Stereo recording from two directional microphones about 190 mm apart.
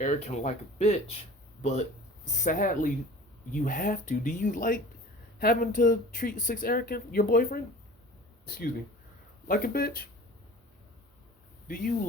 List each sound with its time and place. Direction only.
0.0 s speech: 40° left (ahead or behind)